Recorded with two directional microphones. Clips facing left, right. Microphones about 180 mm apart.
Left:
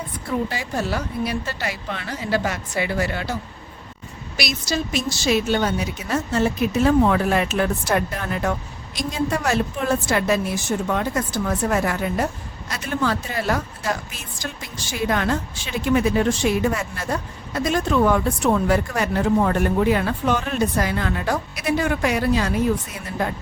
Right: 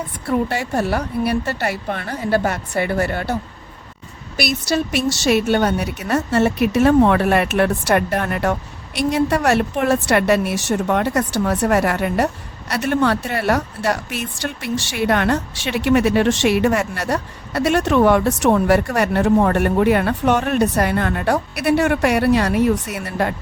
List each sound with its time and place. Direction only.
0.3 s a woman's voice: 65° right (ahead or behind)
5.2 s a woman's voice: 60° right (ahead or behind)
11.4 s a woman's voice: 80° right